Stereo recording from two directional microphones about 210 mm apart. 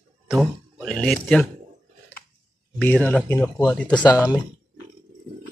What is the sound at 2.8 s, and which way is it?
Speech, 5° left (ahead or behind).